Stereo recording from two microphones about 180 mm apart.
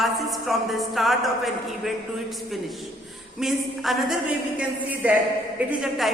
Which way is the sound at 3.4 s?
Centre (ahead or behind).